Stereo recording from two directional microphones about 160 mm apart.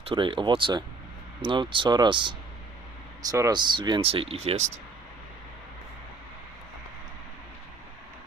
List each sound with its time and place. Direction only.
0.0 s speech: 30° right (ahead or behind)